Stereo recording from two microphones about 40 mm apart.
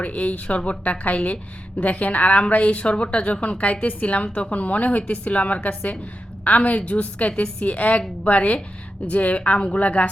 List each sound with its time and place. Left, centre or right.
0.0 s a woman's voice: left